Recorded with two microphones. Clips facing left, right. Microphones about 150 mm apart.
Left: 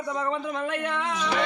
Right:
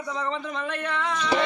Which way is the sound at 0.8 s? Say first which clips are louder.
Even; 10° left (ahead or behind).